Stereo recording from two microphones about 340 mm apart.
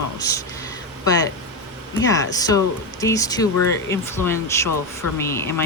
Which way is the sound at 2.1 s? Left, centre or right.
Centre.